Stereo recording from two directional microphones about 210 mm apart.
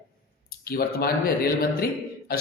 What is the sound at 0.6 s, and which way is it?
Speech, 45° left (ahead or behind).